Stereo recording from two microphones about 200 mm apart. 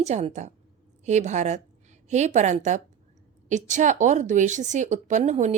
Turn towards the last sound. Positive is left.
turn(degrees=-35)  # may be behind; listen again after turning